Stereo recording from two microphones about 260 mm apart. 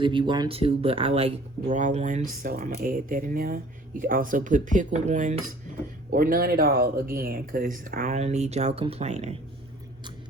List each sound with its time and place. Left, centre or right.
0.0 s speech: centre